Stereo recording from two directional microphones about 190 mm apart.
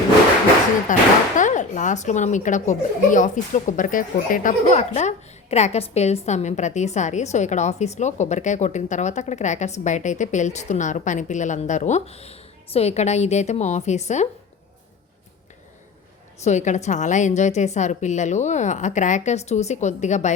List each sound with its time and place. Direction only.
0.9 s a woman's voice: 45° left (ahead or behind)
16.4 s a woman's voice: 40° left (ahead or behind)